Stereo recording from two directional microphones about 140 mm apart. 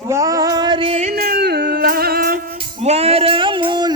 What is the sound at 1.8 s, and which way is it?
Music, 90° right.